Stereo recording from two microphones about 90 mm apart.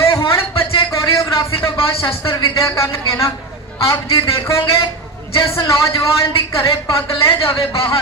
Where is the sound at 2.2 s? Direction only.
35° left (ahead or behind).